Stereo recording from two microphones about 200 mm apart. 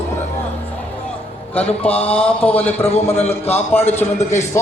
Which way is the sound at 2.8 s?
30° left (ahead or behind).